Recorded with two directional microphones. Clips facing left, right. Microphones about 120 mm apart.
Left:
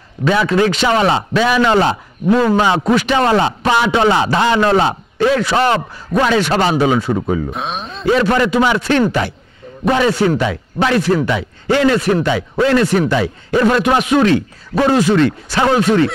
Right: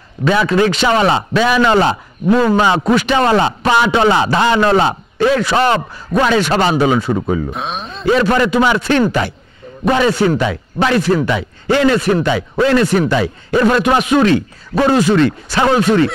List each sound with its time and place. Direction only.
0.2 s speech: 20° right (ahead or behind)
5.7 s speech: 30° right (ahead or behind)
7.5 s speech: centre (ahead or behind)
8.2 s speech: 25° right (ahead or behind)